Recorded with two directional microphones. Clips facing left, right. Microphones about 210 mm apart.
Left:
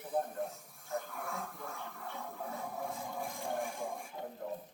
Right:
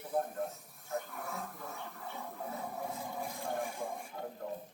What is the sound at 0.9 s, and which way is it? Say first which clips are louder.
Television: even; centre (ahead or behind).